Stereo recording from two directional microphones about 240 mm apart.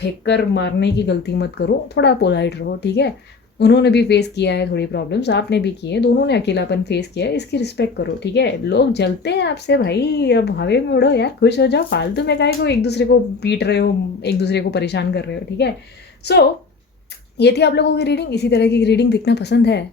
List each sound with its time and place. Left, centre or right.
0.3 s speech: left
17.3 s speech: left